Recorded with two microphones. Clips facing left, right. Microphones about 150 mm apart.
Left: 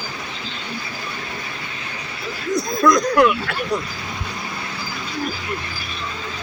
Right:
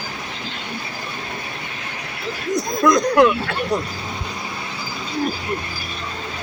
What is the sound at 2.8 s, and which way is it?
Speech, 25° right (ahead or behind).